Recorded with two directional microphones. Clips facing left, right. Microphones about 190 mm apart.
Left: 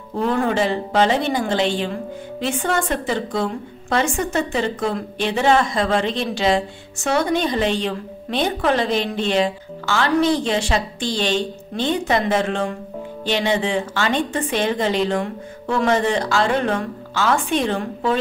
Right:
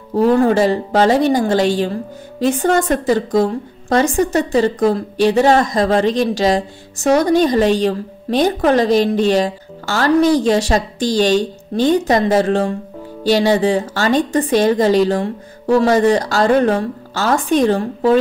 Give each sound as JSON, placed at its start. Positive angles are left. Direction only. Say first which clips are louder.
{"t": 0.1, "sound": "a woman's voice", "louder": "right 7 dB", "side_deg": -40}